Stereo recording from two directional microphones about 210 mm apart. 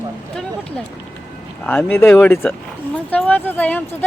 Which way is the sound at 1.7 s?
10° left (ahead or behind).